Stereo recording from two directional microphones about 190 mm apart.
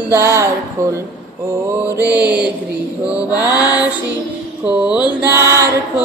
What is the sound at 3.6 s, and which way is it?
Music, 5° right (ahead or behind).